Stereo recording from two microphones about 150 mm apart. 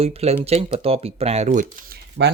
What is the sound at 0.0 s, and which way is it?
Speech, 45° right (ahead or behind).